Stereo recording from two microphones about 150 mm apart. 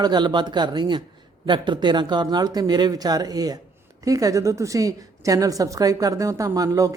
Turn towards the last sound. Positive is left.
turn(degrees=-20)  # may be behind; listen again after turning